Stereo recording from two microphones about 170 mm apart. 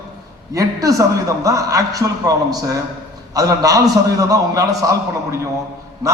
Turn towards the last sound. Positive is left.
turn(degrees=-20)  # may be behind; listen again after turning